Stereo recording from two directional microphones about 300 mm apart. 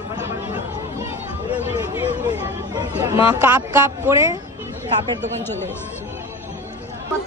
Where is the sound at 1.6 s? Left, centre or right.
Centre.